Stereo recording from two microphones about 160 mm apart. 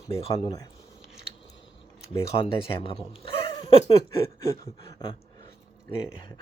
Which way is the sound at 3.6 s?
30° left (ahead or behind).